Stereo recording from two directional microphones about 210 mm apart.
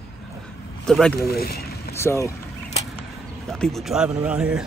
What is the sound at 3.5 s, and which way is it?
Speech, centre (ahead or behind).